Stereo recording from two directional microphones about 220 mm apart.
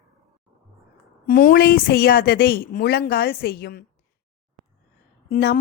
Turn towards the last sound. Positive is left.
turn(degrees=45)  # may be behind; listen again after turning